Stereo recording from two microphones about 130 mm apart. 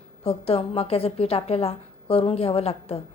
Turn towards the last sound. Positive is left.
turn(degrees=50)  # may be behind; listen again after turning